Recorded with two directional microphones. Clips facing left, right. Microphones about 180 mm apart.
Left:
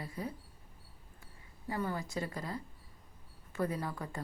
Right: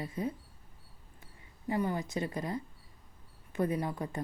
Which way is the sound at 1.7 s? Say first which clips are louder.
Right 4 dB; 20° right (ahead or behind).